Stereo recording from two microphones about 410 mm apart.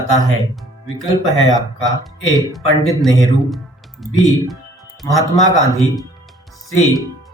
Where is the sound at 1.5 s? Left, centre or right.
Centre.